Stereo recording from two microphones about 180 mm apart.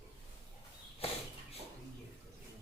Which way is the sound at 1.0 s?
35° left (ahead or behind).